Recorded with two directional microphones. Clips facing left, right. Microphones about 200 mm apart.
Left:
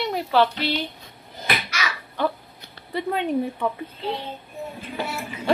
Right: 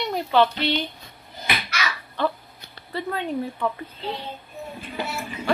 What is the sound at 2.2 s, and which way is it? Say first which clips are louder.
Speech: even; 10° left (ahead or behind).